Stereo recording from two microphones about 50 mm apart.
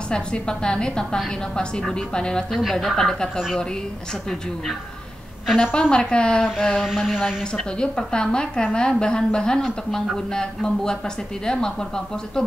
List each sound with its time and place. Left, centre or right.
0.1 s a woman's voice: centre
2.5 s speech: centre
5.8 s a woman's voice: centre
6.7 s a sound: centre
7.7 s a woman's voice: centre